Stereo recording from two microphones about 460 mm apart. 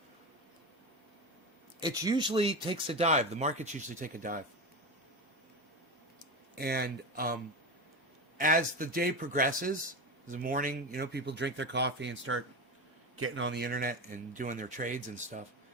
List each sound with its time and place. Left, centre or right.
1.8 s speech: centre
6.6 s speech: centre
8.4 s speech: centre